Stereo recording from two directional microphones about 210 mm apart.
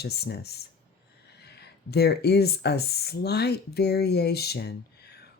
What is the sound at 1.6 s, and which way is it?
Speech, 50° left (ahead or behind).